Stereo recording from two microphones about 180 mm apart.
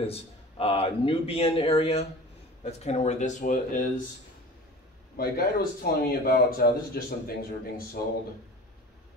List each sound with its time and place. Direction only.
0.0 s speech: 35° left (ahead or behind)
5.1 s speech: 55° left (ahead or behind)